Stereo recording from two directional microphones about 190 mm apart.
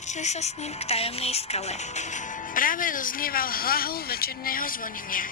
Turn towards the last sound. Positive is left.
turn(degrees=45)  # may be behind; listen again after turning